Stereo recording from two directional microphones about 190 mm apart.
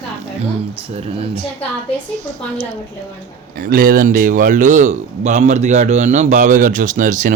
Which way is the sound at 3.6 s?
50° right (ahead or behind).